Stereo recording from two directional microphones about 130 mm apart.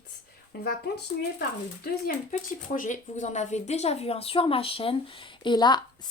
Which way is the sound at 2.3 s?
80° left.